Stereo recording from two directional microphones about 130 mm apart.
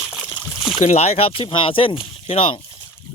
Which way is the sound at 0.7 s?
60° left (ahead or behind).